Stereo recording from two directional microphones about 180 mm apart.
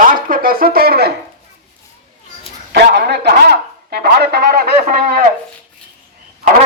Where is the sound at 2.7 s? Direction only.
70° right (ahead or behind); by 5.3 s 50° right (ahead or behind).